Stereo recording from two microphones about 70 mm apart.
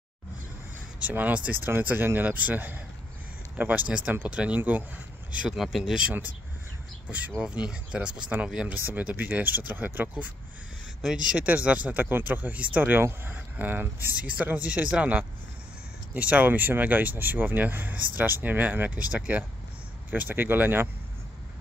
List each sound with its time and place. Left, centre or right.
0.9 s speech: right
5.6 s speech: centre
7.1 s speech: centre
11.3 s speech: centre
14.1 s speech: centre